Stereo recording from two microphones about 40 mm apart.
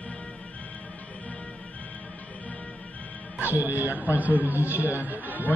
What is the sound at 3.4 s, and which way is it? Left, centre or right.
A man's voice, right.